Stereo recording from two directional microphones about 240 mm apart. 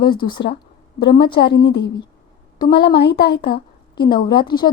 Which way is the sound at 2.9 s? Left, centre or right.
Left.